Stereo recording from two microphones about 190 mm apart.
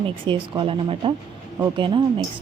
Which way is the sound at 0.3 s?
25° right (ahead or behind).